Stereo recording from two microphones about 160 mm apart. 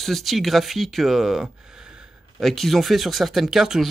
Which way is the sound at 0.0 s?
Centre (ahead or behind).